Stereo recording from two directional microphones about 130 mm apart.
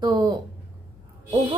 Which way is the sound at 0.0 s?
35° right (ahead or behind).